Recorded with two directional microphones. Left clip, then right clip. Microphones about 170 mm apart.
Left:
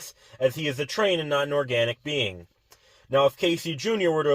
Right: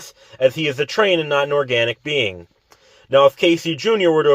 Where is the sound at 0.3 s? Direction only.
25° right (ahead or behind).